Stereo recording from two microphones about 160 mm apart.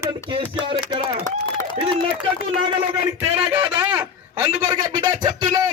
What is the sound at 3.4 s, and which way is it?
Speech, 10° right (ahead or behind).